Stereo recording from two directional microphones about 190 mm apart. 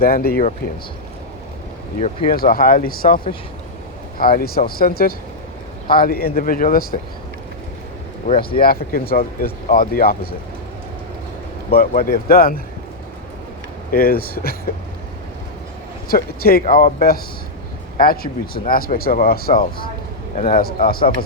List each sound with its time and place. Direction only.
0.0 s speech: 50° left (ahead or behind)
2.0 s speech: 35° left (ahead or behind)
2.3 s speech: 50° left (ahead or behind)
4.2 s speech: 50° left (ahead or behind)
8.6 s speech: 50° left (ahead or behind)
11.7 s speech: 50° left (ahead or behind)
13.9 s speech: 50° left (ahead or behind)
16.0 s speech: 50° left (ahead or behind)